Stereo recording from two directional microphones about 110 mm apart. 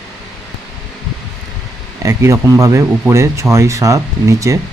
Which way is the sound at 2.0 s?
30° right (ahead or behind).